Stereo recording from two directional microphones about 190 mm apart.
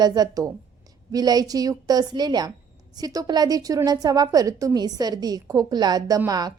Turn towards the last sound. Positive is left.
turn(degrees=-20)  # may be behind; listen again after turning